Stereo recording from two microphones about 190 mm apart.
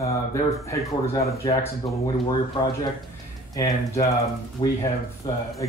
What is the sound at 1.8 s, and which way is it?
Speech, 25° left (ahead or behind).